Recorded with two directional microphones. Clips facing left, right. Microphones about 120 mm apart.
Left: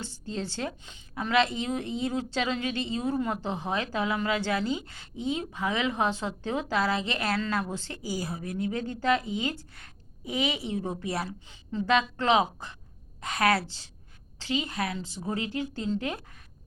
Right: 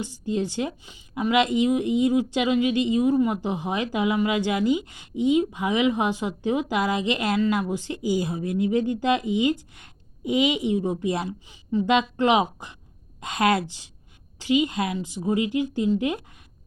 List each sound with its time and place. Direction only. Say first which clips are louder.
0.0 s a woman's voice: right 8 dB; 15° right (ahead or behind)